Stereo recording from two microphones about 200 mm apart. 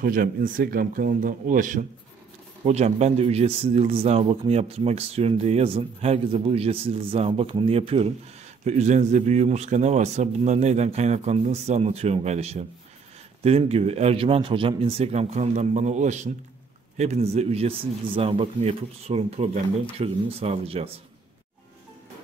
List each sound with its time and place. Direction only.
0.0 s speech: 45° right (ahead or behind); by 20.9 s 30° right (ahead or behind)